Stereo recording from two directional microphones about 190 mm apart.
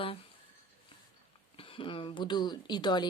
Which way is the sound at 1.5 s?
25° left (ahead or behind).